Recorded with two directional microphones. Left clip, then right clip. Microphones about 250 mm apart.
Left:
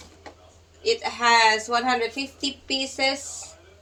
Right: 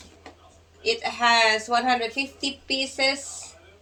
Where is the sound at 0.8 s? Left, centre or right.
Centre.